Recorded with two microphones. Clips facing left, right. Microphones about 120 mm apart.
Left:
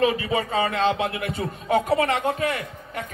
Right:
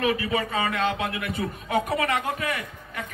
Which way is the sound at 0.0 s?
25° left (ahead or behind).